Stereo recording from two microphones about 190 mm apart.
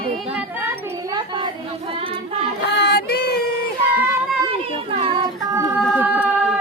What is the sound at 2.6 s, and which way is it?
Child singing, 55° left (ahead or behind).